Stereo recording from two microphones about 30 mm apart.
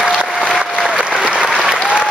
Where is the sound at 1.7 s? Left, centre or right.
Right.